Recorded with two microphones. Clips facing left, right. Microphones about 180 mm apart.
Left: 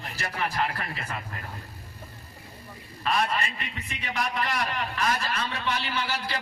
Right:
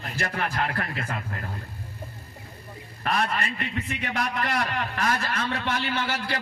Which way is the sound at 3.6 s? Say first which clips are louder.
Right 7 dB; 50° right (ahead or behind).